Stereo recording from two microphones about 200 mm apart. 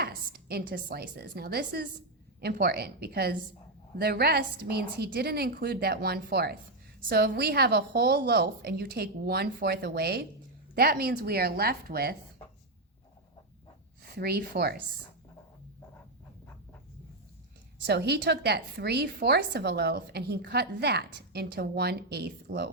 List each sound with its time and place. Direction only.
0.0 s a woman's voice: 50° right (ahead or behind)
14.2 s a woman's voice: 50° right (ahead or behind)
17.8 s a woman's voice: 55° right (ahead or behind)